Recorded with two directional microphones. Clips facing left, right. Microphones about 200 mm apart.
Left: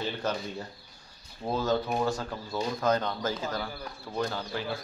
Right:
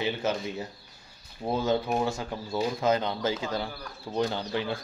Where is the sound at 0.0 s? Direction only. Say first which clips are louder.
Right 3 dB; 5° right (ahead or behind).